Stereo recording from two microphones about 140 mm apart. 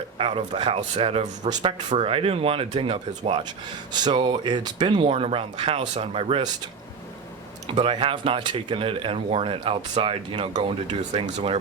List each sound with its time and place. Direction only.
0.2 s speech: 45° right (ahead or behind)
5.0 s speech: 45° right (ahead or behind)
7.7 s speech: 40° right (ahead or behind)